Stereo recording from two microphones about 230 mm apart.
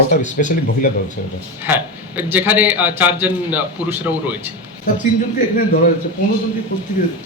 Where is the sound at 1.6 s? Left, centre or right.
Centre.